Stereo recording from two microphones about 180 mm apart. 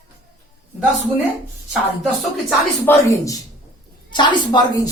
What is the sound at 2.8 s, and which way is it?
Speech, 15° left (ahead or behind).